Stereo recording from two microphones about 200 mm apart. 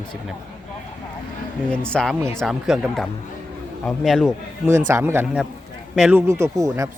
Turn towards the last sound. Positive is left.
turn(degrees=-15)  # may be behind; listen again after turning